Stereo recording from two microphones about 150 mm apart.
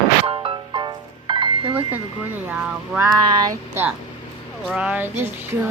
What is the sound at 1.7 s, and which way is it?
Speech, 10° right (ahead or behind).